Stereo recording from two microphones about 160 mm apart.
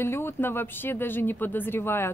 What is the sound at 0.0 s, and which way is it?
Speech, 15° left (ahead or behind).